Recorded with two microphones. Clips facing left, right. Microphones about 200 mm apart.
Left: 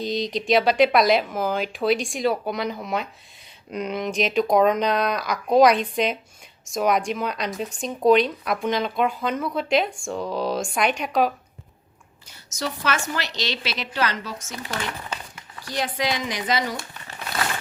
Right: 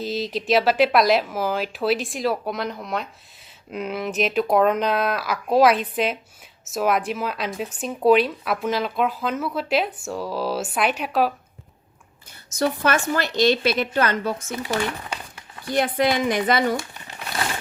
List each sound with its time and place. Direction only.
0.0 s speech: 5° right (ahead or behind)
12.5 s a woman's voice: 55° right (ahead or behind)
15.6 s speech: 55° right (ahead or behind)